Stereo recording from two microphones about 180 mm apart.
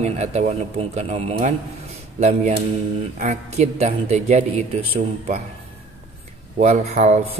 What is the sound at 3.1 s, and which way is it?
A man's voice, 40° right (ahead or behind).